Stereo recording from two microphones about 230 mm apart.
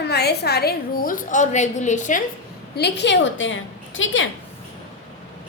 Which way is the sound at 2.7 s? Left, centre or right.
Left.